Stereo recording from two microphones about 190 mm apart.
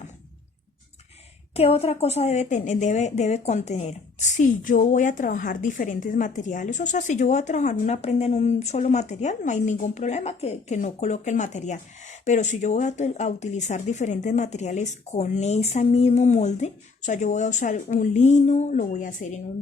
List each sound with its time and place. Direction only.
1.5 s a woman's voice: 30° left (ahead or behind)